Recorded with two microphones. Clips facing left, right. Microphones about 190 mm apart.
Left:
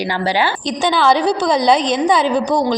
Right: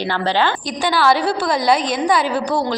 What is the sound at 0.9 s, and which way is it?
A woman's voice, 20° left (ahead or behind).